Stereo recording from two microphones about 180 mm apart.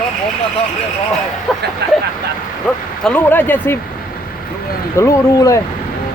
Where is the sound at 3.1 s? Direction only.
10° left (ahead or behind).